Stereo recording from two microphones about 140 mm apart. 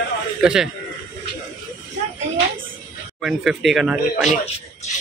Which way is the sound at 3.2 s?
Centre (ahead or behind).